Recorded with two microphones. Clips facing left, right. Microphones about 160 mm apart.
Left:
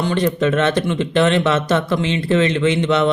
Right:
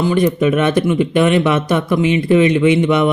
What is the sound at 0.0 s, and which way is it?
Speech, 10° right (ahead or behind).